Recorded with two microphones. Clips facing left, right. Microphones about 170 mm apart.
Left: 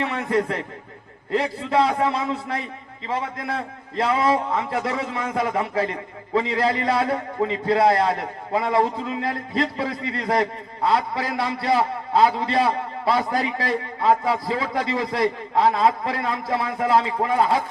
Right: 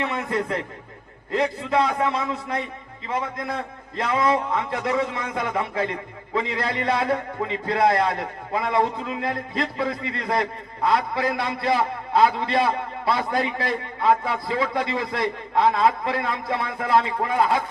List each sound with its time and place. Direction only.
0.1 s a man's voice: 35° left (ahead or behind)
3.9 s a man's voice: 30° left (ahead or behind)